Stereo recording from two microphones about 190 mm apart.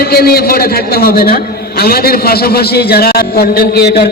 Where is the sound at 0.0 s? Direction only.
55° left (ahead or behind).